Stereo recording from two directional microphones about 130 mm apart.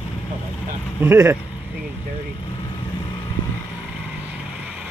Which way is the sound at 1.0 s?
20° right (ahead or behind).